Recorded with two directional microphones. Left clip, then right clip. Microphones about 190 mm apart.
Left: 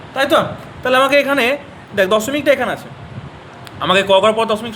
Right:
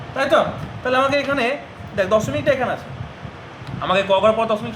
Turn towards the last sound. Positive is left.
turn(degrees=50)  # may be behind; listen again after turning